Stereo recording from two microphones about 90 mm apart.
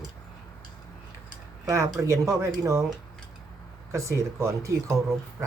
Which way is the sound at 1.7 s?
35° right (ahead or behind).